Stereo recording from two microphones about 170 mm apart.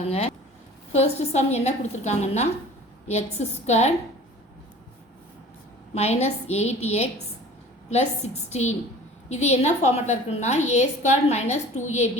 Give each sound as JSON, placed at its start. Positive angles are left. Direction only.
{"t": 0.1, "sound": "a woman's voice", "side_deg": 40}
{"t": 5.9, "sound": "a woman's voice", "side_deg": 40}